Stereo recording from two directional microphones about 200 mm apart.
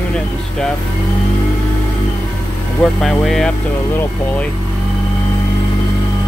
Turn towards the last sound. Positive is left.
turn(degrees=10)  # may be behind; listen again after turning